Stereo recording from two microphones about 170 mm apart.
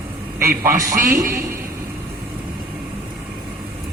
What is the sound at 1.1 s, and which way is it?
Speech, 55° right (ahead or behind).